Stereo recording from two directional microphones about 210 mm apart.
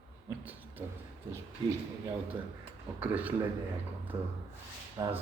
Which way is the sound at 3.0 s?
5° right (ahead or behind).